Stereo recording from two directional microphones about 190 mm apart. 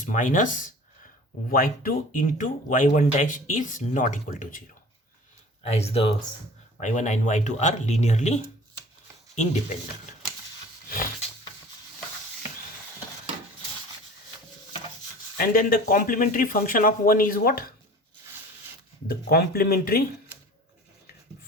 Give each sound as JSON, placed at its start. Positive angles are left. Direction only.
{"t": 0.1, "sound": "speech", "side_deg": 40}
{"t": 5.7, "sound": "speech", "side_deg": 30}
{"t": 10.8, "sound": "roaring cats", "side_deg": 50}
{"t": 15.4, "sound": "speech", "side_deg": 50}
{"t": 19.0, "sound": "speech", "side_deg": 55}